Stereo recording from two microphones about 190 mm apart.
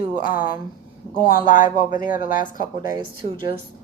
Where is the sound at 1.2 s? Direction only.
45° left (ahead or behind).